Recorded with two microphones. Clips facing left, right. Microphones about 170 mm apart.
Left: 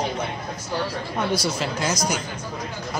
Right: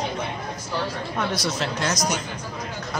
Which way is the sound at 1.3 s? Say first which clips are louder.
Left 2 dB; centre (ahead or behind).